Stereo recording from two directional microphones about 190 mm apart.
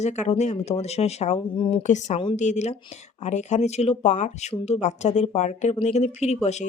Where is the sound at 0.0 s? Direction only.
35° left (ahead or behind).